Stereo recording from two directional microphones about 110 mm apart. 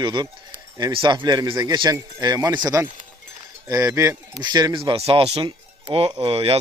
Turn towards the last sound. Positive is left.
turn(degrees=-60)  # may be behind; listen again after turning